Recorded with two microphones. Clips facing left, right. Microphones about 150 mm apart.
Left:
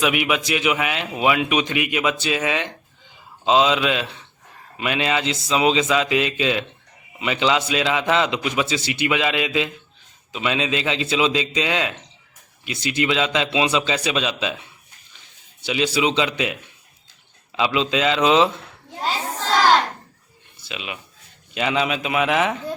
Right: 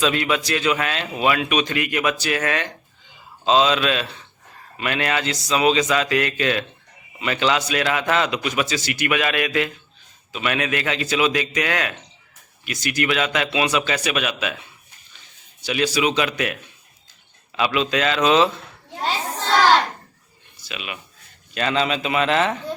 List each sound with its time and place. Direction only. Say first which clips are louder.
0.0 s a man's voice: even; 15° left (ahead or behind)
15.6 s a man's voice: even; 20° left (ahead or behind)
17.6 s a man's voice: left 1 dB; 20° left (ahead or behind)
20.7 s a man's voice: left 1 dB; 20° left (ahead or behind)